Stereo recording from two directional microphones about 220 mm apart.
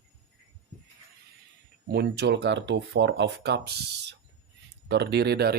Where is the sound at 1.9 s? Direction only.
45° right (ahead or behind).